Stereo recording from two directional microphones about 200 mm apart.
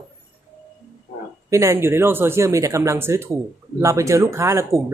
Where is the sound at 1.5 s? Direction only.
15° right (ahead or behind).